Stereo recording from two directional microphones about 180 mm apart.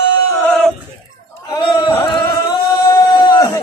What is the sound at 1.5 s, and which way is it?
Singing, 30° left (ahead or behind).